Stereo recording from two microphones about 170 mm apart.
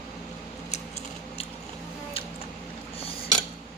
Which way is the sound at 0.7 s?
40° left (ahead or behind).